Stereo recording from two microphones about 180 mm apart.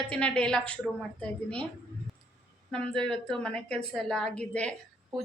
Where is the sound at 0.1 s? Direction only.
5° left (ahead or behind).